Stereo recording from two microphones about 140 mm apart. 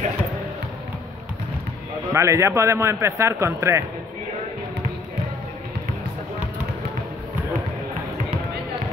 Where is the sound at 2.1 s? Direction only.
20° right (ahead or behind).